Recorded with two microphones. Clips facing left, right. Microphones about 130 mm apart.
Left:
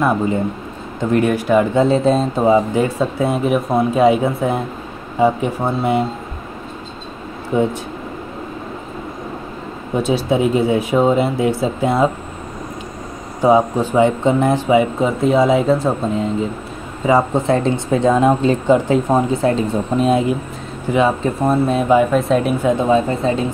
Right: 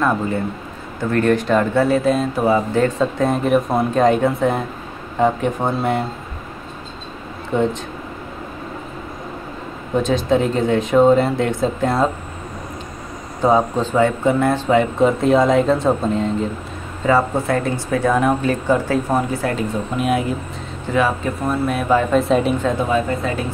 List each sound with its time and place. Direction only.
1.1 s speech: 10° left (ahead or behind)
7.5 s speech: 5° left (ahead or behind)
10.0 s speech: 10° left (ahead or behind)
13.4 s speech: 10° left (ahead or behind)
17.0 s speech: 20° left (ahead or behind)
22.1 s speech: centre (ahead or behind)
22.7 s speech: 25° left (ahead or behind)